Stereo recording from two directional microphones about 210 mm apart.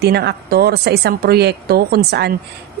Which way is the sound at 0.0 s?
50° right (ahead or behind).